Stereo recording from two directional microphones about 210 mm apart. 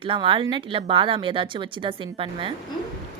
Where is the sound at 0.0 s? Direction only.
25° right (ahead or behind).